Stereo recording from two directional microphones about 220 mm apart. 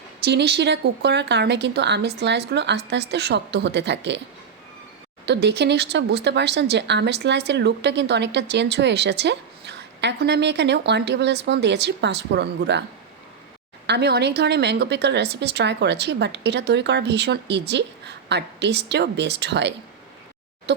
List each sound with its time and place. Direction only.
0.3 s speech: 50° right (ahead or behind)
5.2 s speech: 50° right (ahead or behind)
13.8 s speech: 50° right (ahead or behind)